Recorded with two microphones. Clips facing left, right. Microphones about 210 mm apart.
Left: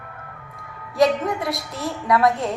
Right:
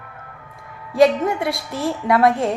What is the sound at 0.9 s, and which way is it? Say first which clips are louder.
A woman's voice: right 4 dB; 30° right (ahead or behind).